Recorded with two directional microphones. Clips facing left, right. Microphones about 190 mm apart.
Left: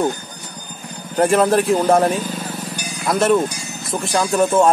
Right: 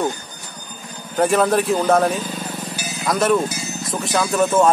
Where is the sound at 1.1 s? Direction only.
Centre (ahead or behind).